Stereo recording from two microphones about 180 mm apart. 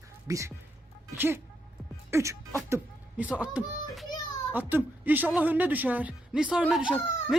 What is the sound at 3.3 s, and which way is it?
A child's voice, 5° right (ahead or behind).